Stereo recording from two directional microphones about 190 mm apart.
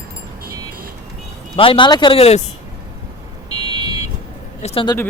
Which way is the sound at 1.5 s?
30° left (ahead or behind).